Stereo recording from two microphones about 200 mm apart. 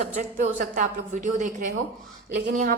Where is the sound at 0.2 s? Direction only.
40° right (ahead or behind).